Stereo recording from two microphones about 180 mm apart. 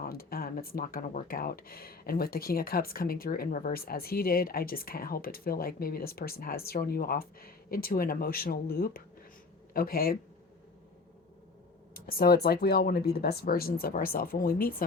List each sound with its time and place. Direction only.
0.0 s speech: 55° left (ahead or behind)
11.9 s speech: 55° left (ahead or behind)